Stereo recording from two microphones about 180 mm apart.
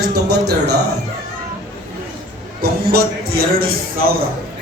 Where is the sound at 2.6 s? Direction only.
60° right (ahead or behind).